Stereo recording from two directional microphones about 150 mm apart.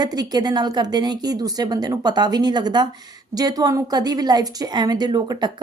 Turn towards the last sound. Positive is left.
turn(degrees=-30)  # may be behind; listen again after turning